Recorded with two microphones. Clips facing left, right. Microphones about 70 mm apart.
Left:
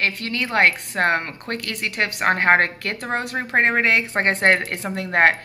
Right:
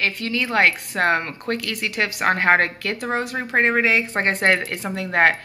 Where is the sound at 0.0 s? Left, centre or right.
Left.